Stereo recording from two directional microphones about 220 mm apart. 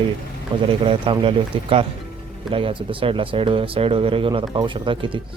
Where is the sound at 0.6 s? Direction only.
25° right (ahead or behind).